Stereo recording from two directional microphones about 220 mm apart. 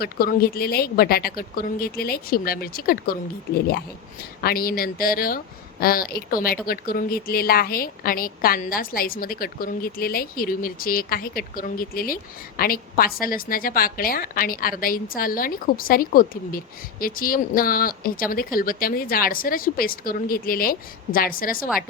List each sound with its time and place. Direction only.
0.0 s a woman's voice: 40° left (ahead or behind)